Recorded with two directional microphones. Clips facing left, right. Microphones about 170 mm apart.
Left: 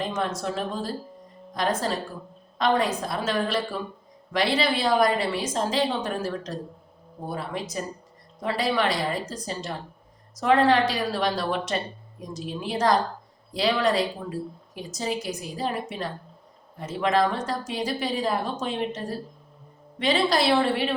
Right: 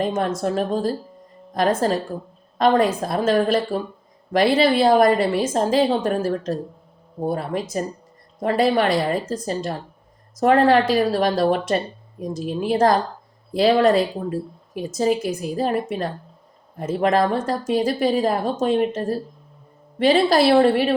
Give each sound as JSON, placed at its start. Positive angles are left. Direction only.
{"t": 0.0, "sound": "a woman's voice", "side_deg": -50}